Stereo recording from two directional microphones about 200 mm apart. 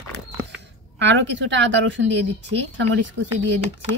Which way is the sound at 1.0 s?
65° right (ahead or behind).